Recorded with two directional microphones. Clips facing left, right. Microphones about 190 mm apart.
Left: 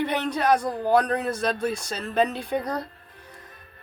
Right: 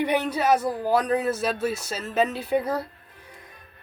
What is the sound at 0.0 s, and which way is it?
Speech, 10° right (ahead or behind).